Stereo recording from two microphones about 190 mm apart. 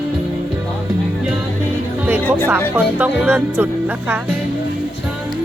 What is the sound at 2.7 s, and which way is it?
Speech, 10° right (ahead or behind).